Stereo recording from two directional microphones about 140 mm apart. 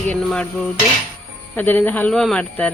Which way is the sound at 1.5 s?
15° left (ahead or behind).